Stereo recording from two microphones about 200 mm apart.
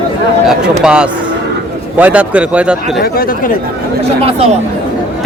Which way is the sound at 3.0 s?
50° left (ahead or behind).